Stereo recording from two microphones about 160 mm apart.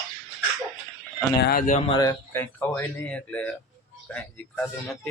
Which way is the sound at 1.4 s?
65° left (ahead or behind).